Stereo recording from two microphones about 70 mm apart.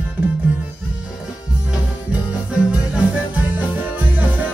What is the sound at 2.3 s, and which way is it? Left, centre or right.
Music, centre.